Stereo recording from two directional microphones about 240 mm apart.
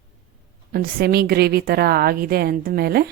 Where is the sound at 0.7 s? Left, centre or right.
Right.